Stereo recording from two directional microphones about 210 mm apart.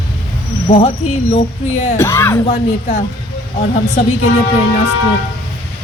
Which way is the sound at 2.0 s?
10° left (ahead or behind).